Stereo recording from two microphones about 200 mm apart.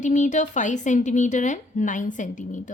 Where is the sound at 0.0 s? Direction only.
40° left (ahead or behind).